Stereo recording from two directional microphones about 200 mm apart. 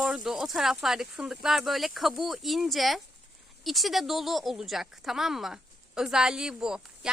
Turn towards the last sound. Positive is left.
turn(degrees=-5)  # may be behind; listen again after turning